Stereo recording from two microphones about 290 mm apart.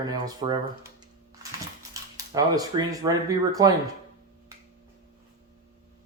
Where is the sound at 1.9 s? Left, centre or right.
Centre.